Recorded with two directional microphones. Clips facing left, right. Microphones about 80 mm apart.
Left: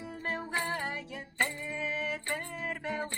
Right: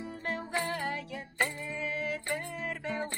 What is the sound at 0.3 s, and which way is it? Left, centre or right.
Music, left.